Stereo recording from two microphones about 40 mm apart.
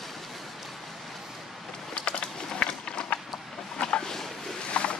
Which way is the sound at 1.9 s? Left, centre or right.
Left.